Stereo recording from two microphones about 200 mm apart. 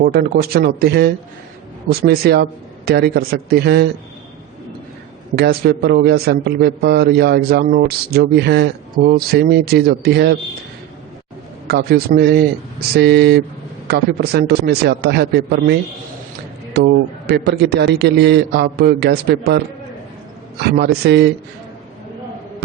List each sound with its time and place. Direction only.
0.0 s a man's voice: 50° right (ahead or behind)
5.4 s a man's voice: 55° right (ahead or behind)
11.7 s a man's voice: 50° right (ahead or behind)